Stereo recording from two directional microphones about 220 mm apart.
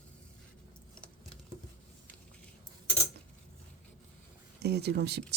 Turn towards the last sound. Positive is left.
turn(degrees=-50)  # may be behind; listen again after turning